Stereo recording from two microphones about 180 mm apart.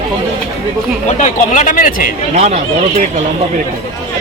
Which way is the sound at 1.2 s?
45° left (ahead or behind).